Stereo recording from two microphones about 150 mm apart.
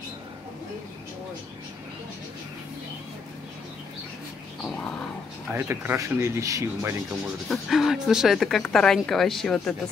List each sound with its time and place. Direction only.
5.5 s speech: 15° right (ahead or behind)
7.4 s speech: centre (ahead or behind)